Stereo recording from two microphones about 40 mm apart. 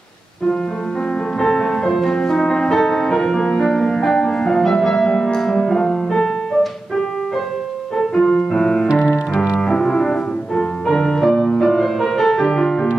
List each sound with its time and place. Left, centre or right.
1.4 s music: centre
8.0 s music: centre